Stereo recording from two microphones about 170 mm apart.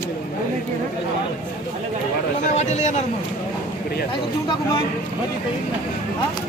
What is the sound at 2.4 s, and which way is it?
Speech, 45° left (ahead or behind).